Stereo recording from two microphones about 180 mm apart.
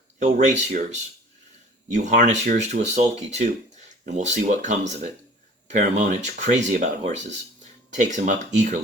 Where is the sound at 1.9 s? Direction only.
40° right (ahead or behind).